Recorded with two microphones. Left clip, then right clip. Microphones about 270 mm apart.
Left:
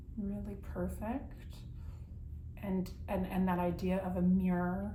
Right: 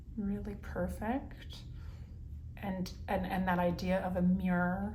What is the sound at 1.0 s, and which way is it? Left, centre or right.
Speech, centre.